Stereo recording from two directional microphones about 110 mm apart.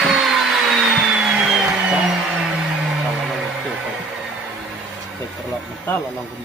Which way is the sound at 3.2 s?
5° right (ahead or behind).